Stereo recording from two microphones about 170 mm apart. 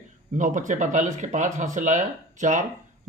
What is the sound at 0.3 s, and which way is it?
Speech, 50° right (ahead or behind).